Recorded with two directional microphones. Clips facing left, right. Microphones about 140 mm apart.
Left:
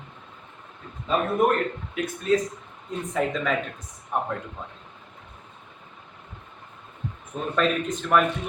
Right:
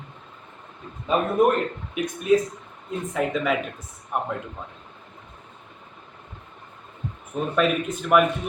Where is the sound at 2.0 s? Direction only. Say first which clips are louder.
Right 2 dB; 20° right (ahead or behind).